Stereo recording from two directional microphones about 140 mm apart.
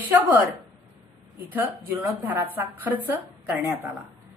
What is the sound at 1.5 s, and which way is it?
A woman's voice, 15° right (ahead or behind).